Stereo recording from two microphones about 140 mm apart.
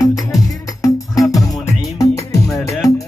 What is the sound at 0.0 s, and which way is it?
Music, 25° left (ahead or behind).